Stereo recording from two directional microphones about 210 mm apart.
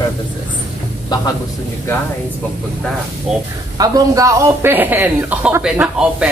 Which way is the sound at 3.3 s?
5° right (ahead or behind).